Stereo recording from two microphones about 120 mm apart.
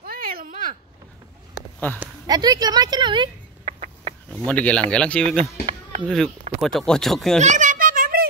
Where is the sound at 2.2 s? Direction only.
35° right (ahead or behind).